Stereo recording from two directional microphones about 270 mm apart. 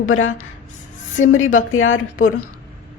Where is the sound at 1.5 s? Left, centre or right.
Left.